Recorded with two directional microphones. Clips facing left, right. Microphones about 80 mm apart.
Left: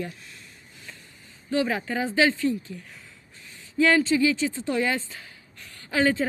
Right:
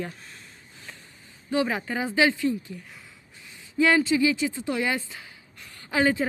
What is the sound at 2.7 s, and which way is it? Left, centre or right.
Speech, centre.